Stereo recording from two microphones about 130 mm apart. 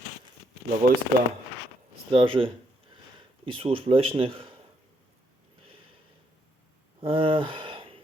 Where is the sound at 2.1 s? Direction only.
40° right (ahead or behind).